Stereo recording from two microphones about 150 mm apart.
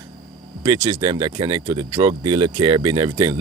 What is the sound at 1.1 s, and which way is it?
Speech, 30° right (ahead or behind).